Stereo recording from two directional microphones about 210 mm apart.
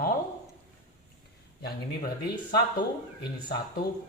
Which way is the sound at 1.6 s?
45° left (ahead or behind).